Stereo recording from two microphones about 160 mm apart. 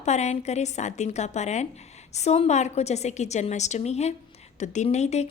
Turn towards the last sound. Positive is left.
turn(degrees=45)  # may be behind; listen again after turning